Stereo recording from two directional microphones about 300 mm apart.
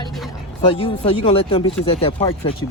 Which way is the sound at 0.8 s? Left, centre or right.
Centre.